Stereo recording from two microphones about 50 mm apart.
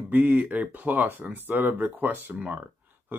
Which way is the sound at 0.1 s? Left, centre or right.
Right.